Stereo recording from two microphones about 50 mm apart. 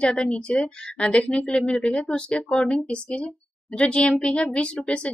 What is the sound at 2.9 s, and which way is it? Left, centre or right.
A woman's voice, left.